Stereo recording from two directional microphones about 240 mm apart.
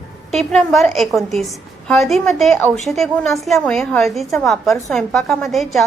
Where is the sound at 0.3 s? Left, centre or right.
Centre.